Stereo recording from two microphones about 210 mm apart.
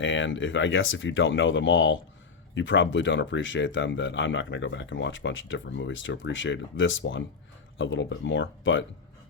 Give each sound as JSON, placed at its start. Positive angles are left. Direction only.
{"t": 0.0, "sound": "speech", "side_deg": 60}